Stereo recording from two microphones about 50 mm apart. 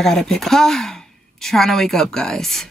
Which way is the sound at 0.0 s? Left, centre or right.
Centre.